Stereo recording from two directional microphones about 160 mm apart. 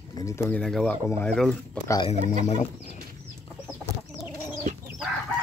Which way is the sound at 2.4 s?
45° left (ahead or behind).